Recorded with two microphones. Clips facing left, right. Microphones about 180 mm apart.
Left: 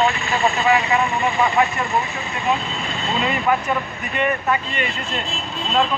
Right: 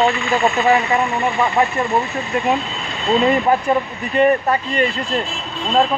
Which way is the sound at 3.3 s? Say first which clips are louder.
Right 2 dB; 35° right (ahead or behind).